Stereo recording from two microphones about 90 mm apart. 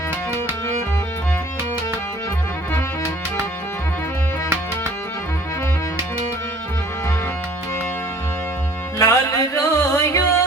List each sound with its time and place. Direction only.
9.0 s music: 35° left (ahead or behind)